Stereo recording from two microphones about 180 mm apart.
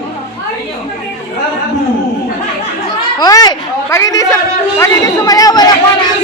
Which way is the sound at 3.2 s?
20° left (ahead or behind).